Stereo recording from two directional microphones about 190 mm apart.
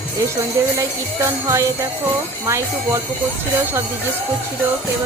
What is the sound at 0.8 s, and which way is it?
A woman's voice, 15° right (ahead or behind).